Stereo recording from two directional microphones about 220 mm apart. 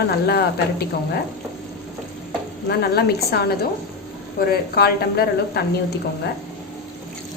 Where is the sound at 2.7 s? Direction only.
45° left (ahead or behind).